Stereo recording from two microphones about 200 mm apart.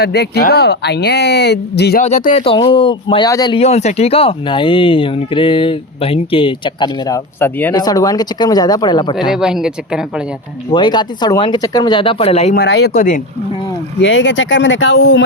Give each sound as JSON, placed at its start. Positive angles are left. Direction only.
{"t": 0.0, "sound": "speech", "side_deg": 55}
{"t": 2.0, "sound": "speech", "side_deg": 35}
{"t": 3.6, "sound": "speech", "side_deg": 35}
{"t": 7.3, "sound": "speech", "side_deg": 10}
{"t": 9.3, "sound": "speech", "side_deg": -5}
{"t": 10.7, "sound": "speech", "side_deg": 20}
{"t": 12.5, "sound": "speech", "side_deg": 55}
{"t": 14.0, "sound": "speech", "side_deg": 70}